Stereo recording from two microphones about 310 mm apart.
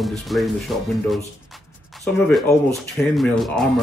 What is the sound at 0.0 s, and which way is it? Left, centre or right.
Speech, centre.